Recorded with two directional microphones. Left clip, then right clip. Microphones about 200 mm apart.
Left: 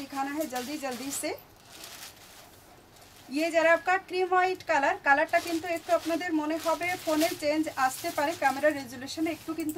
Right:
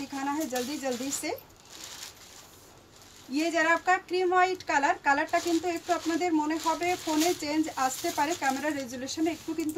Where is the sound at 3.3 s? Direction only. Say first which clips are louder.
Left 2 dB; 15° left (ahead or behind).